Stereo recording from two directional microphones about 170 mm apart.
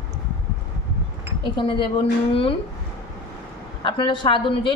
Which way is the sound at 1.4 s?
30° left (ahead or behind).